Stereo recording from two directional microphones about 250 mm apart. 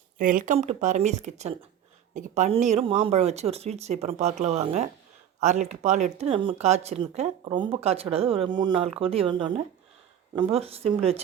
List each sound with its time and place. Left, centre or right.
0.2 s speech: right